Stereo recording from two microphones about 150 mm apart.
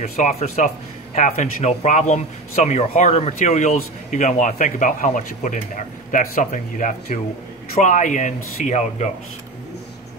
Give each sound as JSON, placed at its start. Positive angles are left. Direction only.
{"t": 0.0, "sound": "speech", "side_deg": 50}